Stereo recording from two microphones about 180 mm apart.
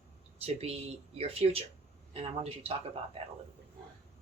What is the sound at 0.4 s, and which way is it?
Speech, 35° right (ahead or behind).